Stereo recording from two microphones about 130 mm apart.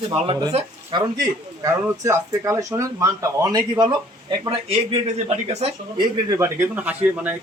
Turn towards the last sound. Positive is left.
turn(degrees=-10)  # may be behind; listen again after turning